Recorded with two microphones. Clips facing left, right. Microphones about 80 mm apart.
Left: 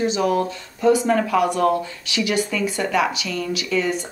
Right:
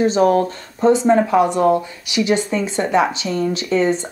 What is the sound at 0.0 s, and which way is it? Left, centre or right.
Speech, right.